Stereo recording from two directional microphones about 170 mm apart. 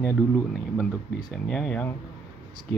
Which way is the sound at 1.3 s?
5° left (ahead or behind).